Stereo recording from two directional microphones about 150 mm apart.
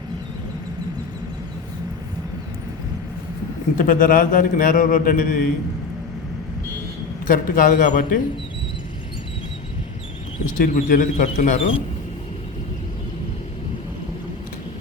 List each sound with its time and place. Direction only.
3.8 s a man's voice: 65° left (ahead or behind)
7.3 s a man's voice: 65° left (ahead or behind)
10.6 s a man's voice: 65° left (ahead or behind)